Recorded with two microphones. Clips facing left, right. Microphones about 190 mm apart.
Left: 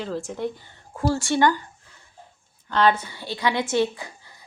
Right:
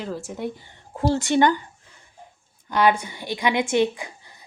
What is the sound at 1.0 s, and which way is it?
Speech, 20° right (ahead or behind).